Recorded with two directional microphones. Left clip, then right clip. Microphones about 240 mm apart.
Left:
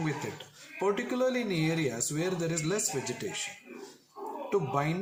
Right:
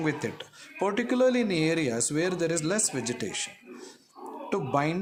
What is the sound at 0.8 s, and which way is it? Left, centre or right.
Speech, right.